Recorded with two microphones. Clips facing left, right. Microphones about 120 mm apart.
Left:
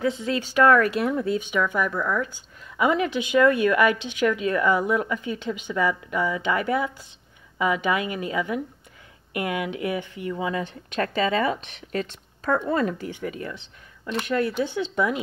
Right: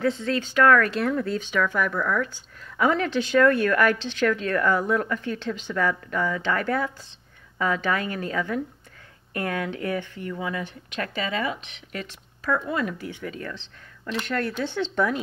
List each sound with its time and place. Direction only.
0.0 s speech: 5° left (ahead or behind); by 13.0 s 35° left (ahead or behind)
13.0 s speech: 20° left (ahead or behind)
14.2 s speech: 10° left (ahead or behind)